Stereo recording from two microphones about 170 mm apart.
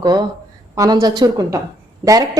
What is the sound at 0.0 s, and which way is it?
A woman's voice, 25° right (ahead or behind).